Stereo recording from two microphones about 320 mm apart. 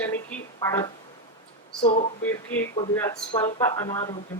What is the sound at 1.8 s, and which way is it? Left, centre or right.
Speech, centre.